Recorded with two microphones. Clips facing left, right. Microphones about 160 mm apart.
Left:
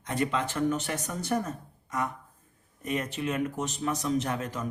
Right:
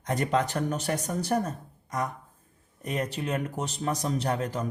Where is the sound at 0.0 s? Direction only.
45° right (ahead or behind).